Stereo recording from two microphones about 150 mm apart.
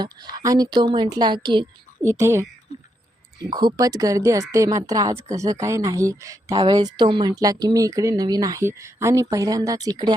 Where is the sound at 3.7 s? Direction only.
25° right (ahead or behind).